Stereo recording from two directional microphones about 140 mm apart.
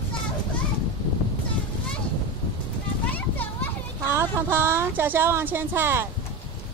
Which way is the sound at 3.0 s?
10° left (ahead or behind).